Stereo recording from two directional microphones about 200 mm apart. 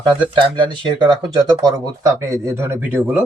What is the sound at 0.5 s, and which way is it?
Speech, 25° right (ahead or behind).